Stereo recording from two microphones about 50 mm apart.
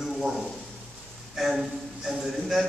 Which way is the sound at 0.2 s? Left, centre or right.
Centre.